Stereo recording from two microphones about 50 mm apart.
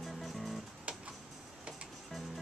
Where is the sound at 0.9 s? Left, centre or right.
Right.